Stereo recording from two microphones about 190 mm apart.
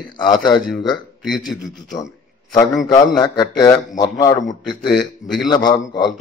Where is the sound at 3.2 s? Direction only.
20° left (ahead or behind).